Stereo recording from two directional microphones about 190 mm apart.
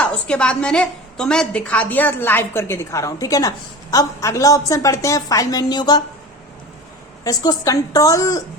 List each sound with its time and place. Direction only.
0.0 s a woman's voice: 5° left (ahead or behind)
7.3 s a woman's voice: 20° left (ahead or behind)